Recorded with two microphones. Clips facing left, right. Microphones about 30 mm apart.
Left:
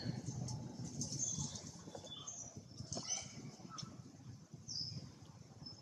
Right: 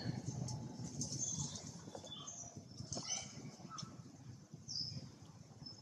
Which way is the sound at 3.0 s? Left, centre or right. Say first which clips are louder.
Even; centre.